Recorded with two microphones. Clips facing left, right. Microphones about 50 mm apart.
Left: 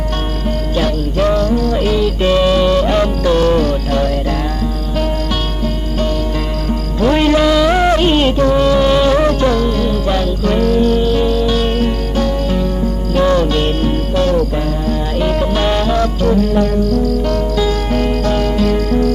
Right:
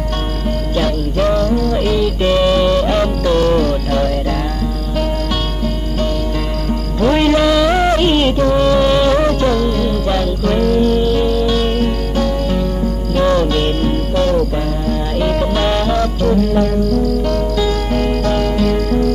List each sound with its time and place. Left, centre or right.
1.2 s music: centre
1.9 s music: left
2.5 s music: centre
2.8 s music: left
3.5 s music: centre
7.0 s music: centre
7.2 s music: centre
17.3 s music: left
18.0 s music: centre